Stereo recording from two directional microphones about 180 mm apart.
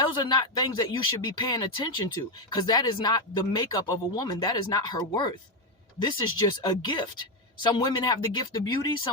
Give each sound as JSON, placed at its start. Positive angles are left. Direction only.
{"t": 0.0, "sound": "speech", "side_deg": 25}